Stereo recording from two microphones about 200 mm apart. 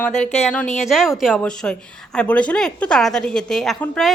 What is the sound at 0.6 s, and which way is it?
Speech, 35° left (ahead or behind).